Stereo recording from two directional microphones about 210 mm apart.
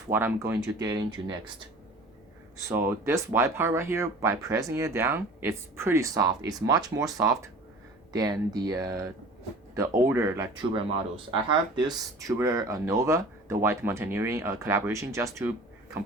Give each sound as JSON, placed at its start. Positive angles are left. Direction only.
{"t": 0.1, "sound": "speech", "side_deg": -10}
{"t": 2.6, "sound": "speech", "side_deg": -10}